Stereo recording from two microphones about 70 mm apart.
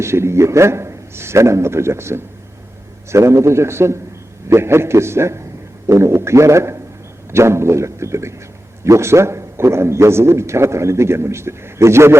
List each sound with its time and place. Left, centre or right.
0.0 s a man's voice: right